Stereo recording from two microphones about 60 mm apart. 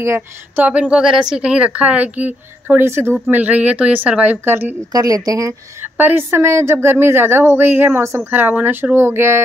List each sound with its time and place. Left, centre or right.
0.7 s speech: right
2.8 s speech: right
3.3 s speech: right
4.5 s speech: right
4.9 s speech: right
5.8 s speech: right
6.3 s speech: right